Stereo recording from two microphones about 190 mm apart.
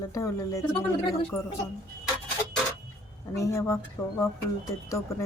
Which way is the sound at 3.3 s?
15° left (ahead or behind).